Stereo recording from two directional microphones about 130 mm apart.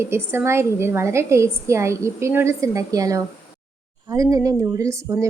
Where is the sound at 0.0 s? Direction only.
20° right (ahead or behind).